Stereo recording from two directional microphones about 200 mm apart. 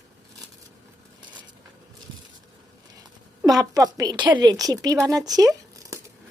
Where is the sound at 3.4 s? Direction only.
20° right (ahead or behind).